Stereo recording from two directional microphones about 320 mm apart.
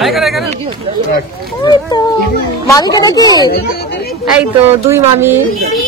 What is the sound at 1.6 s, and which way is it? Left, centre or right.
A woman's voice, centre.